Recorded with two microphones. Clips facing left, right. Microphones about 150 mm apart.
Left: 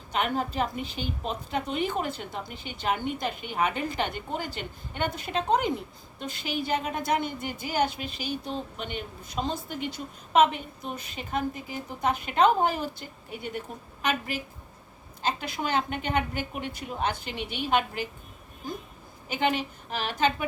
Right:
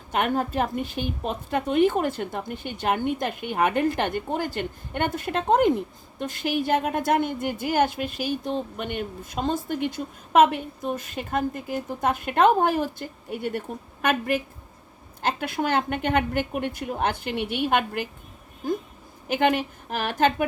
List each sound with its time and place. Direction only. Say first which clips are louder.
0.1 s a woman's voice: right 4 dB; 50° right (ahead or behind)
19.3 s a woman's voice: right 5 dB; 55° right (ahead or behind)